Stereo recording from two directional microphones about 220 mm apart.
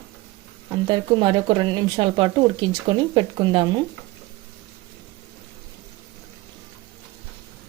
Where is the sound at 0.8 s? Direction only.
20° right (ahead or behind).